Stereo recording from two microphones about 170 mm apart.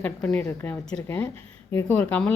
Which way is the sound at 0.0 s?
10° left (ahead or behind).